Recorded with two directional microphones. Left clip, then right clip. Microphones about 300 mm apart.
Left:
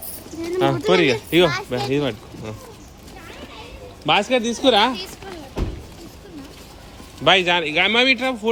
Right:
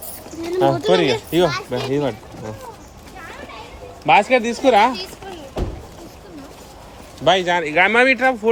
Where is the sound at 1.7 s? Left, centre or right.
Centre.